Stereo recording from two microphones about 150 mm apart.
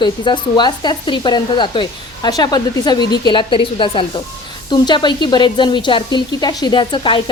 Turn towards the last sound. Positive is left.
turn(degrees=35)  # may be behind; listen again after turning